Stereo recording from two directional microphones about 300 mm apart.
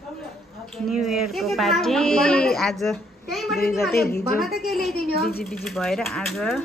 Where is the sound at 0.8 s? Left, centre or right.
Centre.